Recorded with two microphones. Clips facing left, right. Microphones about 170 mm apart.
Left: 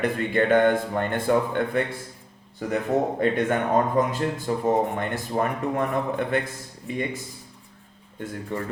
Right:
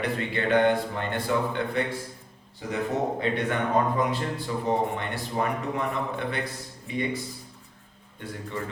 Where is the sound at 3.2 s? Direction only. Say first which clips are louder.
Left 4 dB; 50° left (ahead or behind).